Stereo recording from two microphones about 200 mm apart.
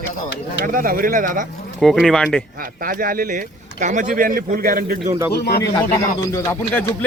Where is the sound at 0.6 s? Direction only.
45° right (ahead or behind).